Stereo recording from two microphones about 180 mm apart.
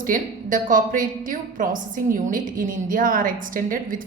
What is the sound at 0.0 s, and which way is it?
A woman's voice, 50° right (ahead or behind).